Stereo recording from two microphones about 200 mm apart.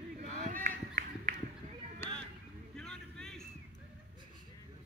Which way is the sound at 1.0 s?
45° right (ahead or behind).